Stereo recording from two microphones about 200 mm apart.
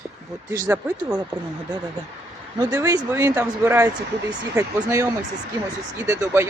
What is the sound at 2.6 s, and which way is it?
Speech, 15° right (ahead or behind).